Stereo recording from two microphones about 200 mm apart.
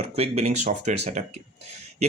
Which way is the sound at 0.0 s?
30° right (ahead or behind).